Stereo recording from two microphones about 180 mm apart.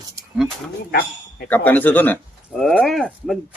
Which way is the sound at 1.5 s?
10° left (ahead or behind).